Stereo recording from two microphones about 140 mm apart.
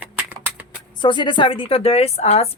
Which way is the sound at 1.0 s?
35° left (ahead or behind).